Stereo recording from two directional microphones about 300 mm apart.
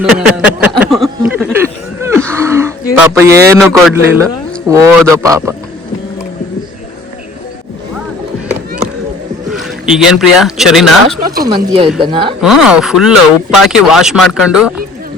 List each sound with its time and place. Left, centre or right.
0.0 s speech: centre
0.8 s a sound: centre
2.2 s gasp: centre
3.2 s a man's voice: centre
9.5 s speech: centre
11.4 s a man's voice: centre
12.4 s speech: centre